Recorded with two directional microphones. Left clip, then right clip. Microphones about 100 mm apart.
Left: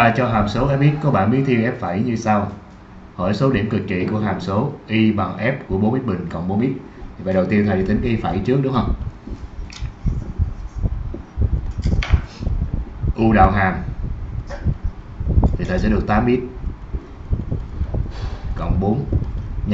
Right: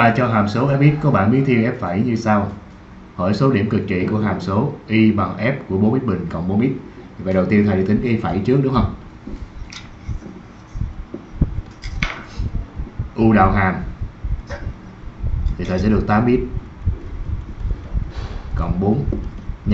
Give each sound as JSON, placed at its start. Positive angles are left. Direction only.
{"t": 0.0, "sound": "speech", "side_deg": -5}
{"t": 11.8, "sound": "a sound", "side_deg": -20}
{"t": 13.1, "sound": "speech", "side_deg": -5}
{"t": 15.4, "sound": "a sound", "side_deg": -20}
{"t": 15.8, "sound": "speech", "side_deg": 0}
{"t": 18.6, "sound": "speech", "side_deg": 0}